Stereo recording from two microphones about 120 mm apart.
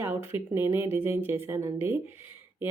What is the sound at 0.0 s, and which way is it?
Speech, 20° right (ahead or behind).